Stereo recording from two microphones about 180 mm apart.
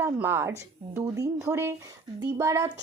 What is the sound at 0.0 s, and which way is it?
Speech, 15° right (ahead or behind).